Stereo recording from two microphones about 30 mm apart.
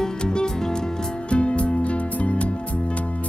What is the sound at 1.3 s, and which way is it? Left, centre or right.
Music, left.